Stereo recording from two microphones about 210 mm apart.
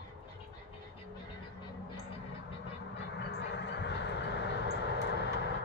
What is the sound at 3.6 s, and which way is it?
Vehicle, 55° left (ahead or behind).